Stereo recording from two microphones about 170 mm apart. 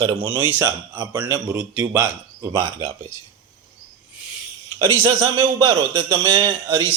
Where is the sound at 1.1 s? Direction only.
25° right (ahead or behind).